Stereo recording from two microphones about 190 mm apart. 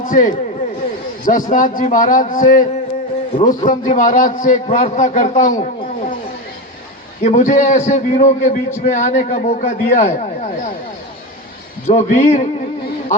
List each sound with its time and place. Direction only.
0.1 s a man's voice: 45° left (ahead or behind)
7.2 s a man's voice: 40° left (ahead or behind)
11.9 s a man's voice: 40° left (ahead or behind)